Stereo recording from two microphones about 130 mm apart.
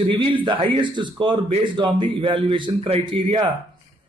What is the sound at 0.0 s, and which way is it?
A man's voice, 40° right (ahead or behind).